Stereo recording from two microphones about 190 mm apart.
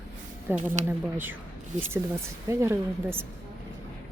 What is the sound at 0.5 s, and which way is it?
Speech, 10° right (ahead or behind).